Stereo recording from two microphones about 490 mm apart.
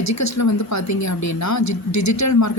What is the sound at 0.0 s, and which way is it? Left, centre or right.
Speech, left.